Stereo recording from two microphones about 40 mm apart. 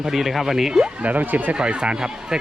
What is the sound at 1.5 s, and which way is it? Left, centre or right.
Speech, right.